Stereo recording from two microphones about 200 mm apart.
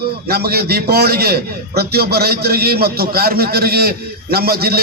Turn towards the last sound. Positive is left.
turn(degrees=-50)  # may be behind; listen again after turning